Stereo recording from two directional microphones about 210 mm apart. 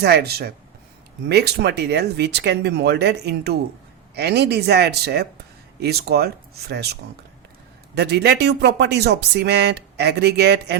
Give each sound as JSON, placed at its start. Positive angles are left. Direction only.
{"t": 0.0, "sound": "speech", "side_deg": -50}